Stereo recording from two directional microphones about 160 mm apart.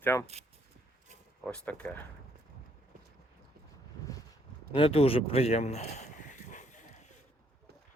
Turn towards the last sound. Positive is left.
turn(degrees=50)  # may be behind; listen again after turning